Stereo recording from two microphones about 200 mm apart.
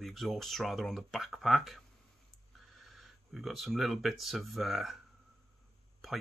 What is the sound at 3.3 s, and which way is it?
Speech, centre (ahead or behind).